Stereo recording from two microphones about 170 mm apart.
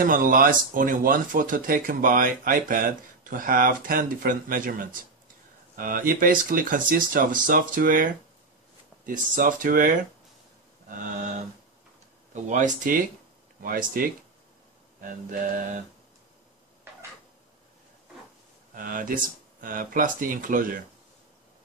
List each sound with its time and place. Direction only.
0.0 s speech: 50° right (ahead or behind)
12.4 s speech: 45° right (ahead or behind)
18.8 s speech: 55° right (ahead or behind)